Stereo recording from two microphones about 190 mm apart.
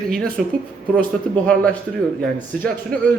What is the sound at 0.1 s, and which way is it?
Speech, centre (ahead or behind).